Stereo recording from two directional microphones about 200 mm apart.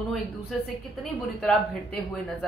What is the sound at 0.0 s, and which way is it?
Speech, centre (ahead or behind).